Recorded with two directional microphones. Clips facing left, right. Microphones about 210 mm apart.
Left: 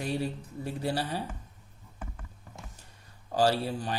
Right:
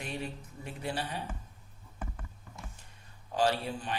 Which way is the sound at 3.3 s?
40° left (ahead or behind).